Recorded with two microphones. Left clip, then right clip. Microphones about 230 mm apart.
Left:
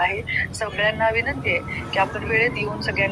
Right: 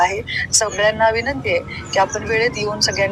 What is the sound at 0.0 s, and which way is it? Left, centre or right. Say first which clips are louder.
Speech: right 4 dB; right.